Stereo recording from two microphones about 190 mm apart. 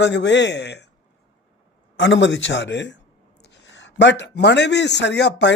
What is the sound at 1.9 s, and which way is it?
A man's voice, 75° left (ahead or behind).